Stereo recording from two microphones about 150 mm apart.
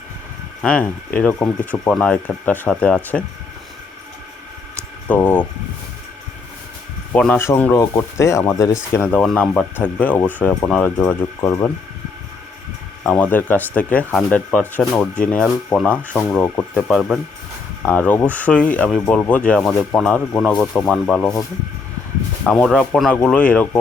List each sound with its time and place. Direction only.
0.6 s speech: 10° left (ahead or behind)
5.0 s speech: 10° left (ahead or behind)
7.1 s speech: 10° left (ahead or behind)
13.0 s speech: 10° left (ahead or behind)
22.4 s speech: 5° left (ahead or behind)